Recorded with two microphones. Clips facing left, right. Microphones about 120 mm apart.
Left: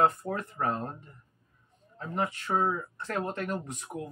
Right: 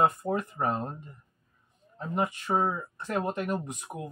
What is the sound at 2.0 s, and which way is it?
Speech, 15° right (ahead or behind).